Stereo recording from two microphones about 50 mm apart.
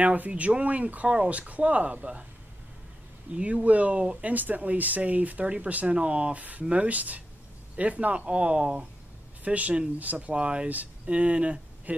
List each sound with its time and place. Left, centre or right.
0.0 s speech: right
3.3 s speech: right
9.4 s speech: right
10.3 s speech: right